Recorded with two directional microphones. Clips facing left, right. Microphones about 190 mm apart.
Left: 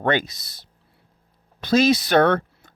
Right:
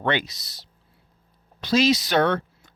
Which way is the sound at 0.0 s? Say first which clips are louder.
Left 3 dB; 45° left (ahead or behind).